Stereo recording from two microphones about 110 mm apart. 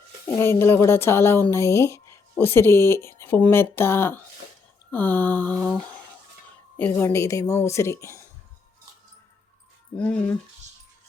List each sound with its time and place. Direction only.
0.3 s speech: 20° left (ahead or behind)
4.9 s mantra: 15° left (ahead or behind)
6.7 s speech: 20° left (ahead or behind)
10.0 s mantra: 10° left (ahead or behind)